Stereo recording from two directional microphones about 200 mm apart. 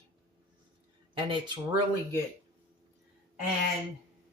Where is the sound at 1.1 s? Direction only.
20° right (ahead or behind).